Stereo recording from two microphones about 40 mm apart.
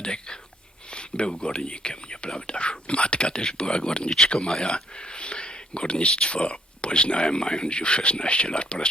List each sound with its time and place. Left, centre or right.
0.0 s speech: left